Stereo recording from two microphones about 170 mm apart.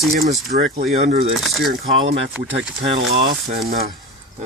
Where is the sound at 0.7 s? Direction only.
40° right (ahead or behind).